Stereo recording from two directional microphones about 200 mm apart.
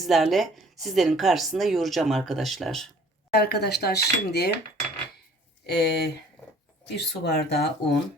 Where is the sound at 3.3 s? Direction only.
50° left (ahead or behind).